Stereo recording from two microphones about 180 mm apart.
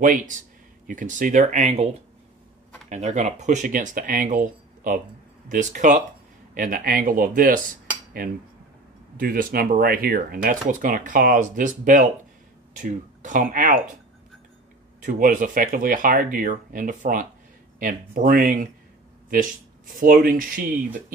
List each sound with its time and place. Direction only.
0.0 s speech: 45° right (ahead or behind)
2.9 s speech: 40° right (ahead or behind)
9.1 s speech: 50° right (ahead or behind)
15.0 s speech: 45° right (ahead or behind)
20.0 s speech: 50° right (ahead or behind)